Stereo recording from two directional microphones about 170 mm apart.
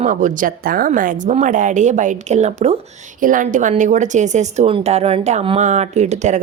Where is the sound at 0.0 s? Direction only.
50° right (ahead or behind).